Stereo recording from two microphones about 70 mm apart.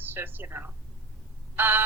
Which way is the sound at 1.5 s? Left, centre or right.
Right.